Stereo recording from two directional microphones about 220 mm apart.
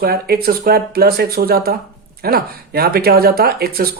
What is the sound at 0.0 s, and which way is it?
Speech, 45° right (ahead or behind).